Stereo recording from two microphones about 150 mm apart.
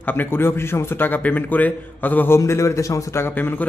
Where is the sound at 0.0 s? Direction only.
15° left (ahead or behind).